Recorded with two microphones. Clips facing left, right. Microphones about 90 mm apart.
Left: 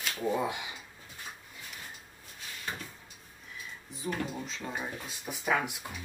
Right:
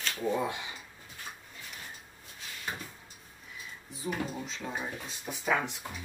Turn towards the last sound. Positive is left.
turn(degrees=10)  # may be behind; listen again after turning